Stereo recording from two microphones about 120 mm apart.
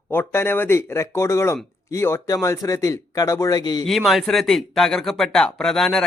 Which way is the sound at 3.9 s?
Centre (ahead or behind).